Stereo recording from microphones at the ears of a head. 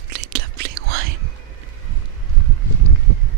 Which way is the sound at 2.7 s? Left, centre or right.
Right.